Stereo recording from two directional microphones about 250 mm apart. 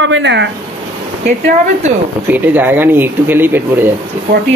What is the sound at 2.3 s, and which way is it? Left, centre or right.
Speech, centre.